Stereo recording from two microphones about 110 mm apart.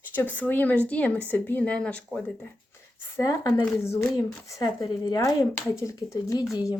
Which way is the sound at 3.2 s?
30° left (ahead or behind).